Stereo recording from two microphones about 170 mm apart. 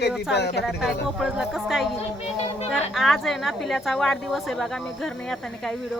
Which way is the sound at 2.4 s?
40° left (ahead or behind).